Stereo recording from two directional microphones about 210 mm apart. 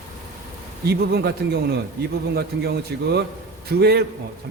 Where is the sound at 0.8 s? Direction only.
50° right (ahead or behind).